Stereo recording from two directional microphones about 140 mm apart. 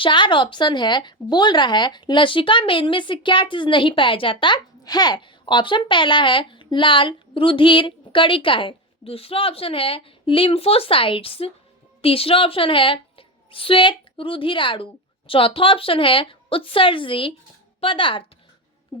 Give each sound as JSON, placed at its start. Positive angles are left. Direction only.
{"t": 0.0, "sound": "a woman's voice", "side_deg": 35}